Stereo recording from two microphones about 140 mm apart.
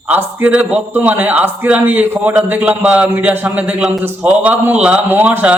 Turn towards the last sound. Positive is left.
turn(degrees=-10)  # may be behind; listen again after turning